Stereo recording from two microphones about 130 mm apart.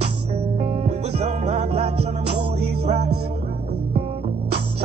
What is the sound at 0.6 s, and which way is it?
Music, 55° right (ahead or behind).